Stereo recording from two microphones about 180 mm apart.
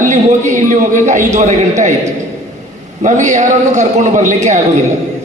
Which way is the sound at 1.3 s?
40° right (ahead or behind).